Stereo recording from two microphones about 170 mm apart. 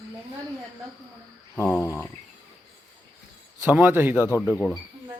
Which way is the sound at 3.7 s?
10° right (ahead or behind).